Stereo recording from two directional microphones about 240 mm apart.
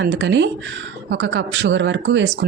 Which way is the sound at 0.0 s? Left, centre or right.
Right.